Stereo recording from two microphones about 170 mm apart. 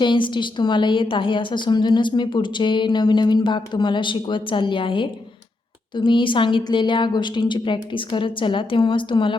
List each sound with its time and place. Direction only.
0.0 s a woman's voice: 30° left (ahead or behind)